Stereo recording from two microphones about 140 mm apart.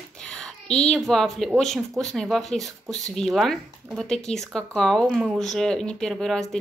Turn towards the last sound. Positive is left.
turn(degrees=5)  # may be behind; listen again after turning